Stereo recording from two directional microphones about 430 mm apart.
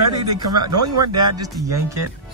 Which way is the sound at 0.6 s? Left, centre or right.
Right.